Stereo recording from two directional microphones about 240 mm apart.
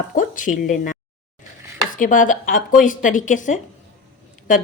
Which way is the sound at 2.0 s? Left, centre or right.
Left.